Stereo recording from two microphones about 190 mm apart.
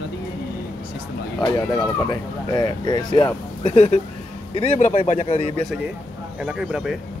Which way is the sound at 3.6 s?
35° left (ahead or behind).